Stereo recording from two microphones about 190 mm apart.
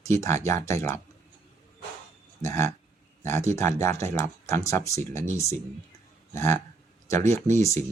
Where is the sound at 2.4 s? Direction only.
15° left (ahead or behind).